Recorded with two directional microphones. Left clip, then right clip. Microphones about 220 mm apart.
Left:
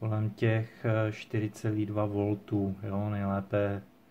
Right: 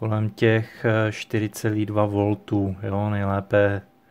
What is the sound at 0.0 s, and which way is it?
Speech, 45° right (ahead or behind).